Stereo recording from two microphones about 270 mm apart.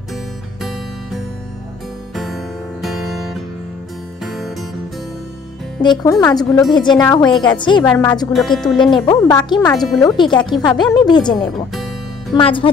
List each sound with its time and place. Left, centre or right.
0.6 s music: centre
5.8 s a woman's voice: centre
8.1 s speech: centre
8.9 s a woman's voice: centre
11.7 s music: centre
12.4 s speech: centre